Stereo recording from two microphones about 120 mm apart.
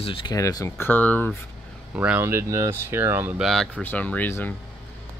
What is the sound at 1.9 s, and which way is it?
Speech, 15° right (ahead or behind).